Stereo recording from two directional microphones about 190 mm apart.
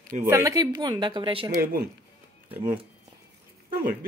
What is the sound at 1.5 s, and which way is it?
Speech, 50° right (ahead or behind).